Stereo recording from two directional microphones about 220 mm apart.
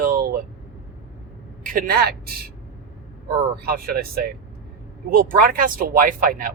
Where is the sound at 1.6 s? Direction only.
40° right (ahead or behind).